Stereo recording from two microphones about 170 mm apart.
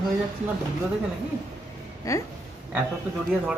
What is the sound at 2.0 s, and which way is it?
Speech, 20° left (ahead or behind).